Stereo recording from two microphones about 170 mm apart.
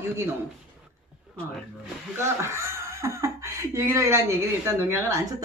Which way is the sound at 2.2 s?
15° right (ahead or behind).